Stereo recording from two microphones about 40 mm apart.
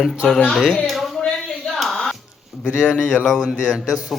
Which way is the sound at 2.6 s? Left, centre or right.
Centre.